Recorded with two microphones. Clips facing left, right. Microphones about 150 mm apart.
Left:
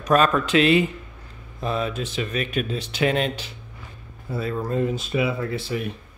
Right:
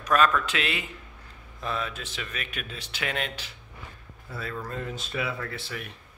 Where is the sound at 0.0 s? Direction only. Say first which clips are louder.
Left 4 dB; 30° left (ahead or behind).